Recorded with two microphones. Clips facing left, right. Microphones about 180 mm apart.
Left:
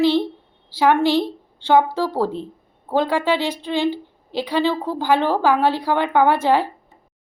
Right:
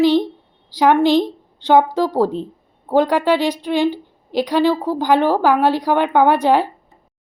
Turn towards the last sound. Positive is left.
turn(degrees=-15)  # may be behind; listen again after turning